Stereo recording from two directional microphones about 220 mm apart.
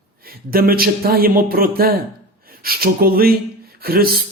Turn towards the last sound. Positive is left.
turn(degrees=-45)  # may be behind; listen again after turning